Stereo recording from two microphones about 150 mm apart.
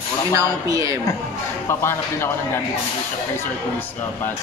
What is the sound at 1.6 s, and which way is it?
Speech, 15° left (ahead or behind).